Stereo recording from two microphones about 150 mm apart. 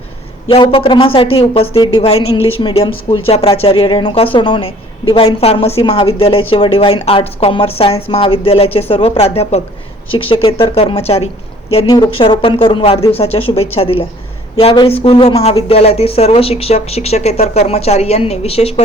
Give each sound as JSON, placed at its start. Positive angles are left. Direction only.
{"t": 0.4, "sound": "a woman's voice", "side_deg": 35}